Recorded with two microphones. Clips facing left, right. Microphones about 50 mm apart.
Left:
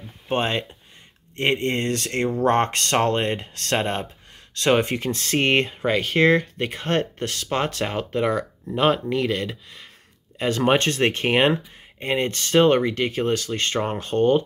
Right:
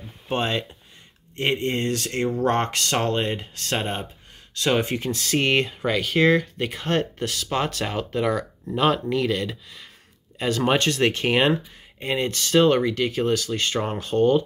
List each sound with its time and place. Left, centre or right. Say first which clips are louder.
0.3 s speech: left 1 dB; left
1.3 s speech: left 2 dB; left
4.6 s speech: left 3 dB; left
5.1 s speech: left 1 dB; left